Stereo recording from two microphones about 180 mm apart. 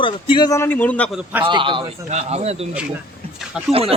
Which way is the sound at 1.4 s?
25° right (ahead or behind).